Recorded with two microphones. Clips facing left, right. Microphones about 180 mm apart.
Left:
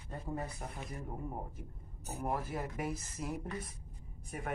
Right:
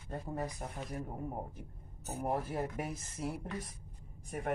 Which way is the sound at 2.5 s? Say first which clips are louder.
Right 1 dB; 45° right (ahead or behind).